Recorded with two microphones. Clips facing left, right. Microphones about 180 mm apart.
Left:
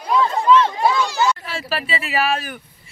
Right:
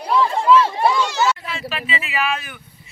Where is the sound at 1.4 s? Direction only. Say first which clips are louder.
Left 2 dB; 40° left (ahead or behind).